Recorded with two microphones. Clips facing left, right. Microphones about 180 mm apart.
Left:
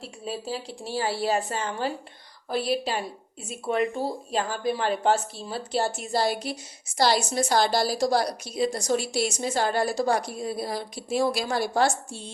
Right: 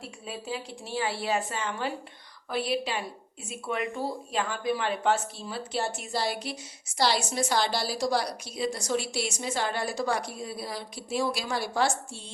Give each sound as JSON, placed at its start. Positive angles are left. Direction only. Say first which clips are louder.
{"t": 0.0, "sound": "a woman's voice", "louder": "left 5 dB", "side_deg": 35}